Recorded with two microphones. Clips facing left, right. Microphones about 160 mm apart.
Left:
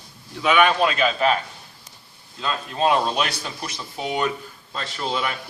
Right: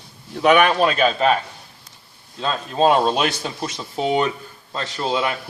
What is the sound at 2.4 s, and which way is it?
Speech, 30° right (ahead or behind).